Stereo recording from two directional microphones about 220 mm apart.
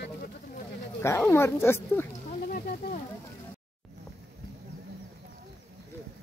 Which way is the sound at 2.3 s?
40° left (ahead or behind).